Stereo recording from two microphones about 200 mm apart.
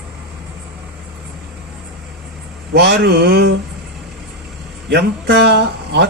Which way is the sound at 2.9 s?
55° right (ahead or behind).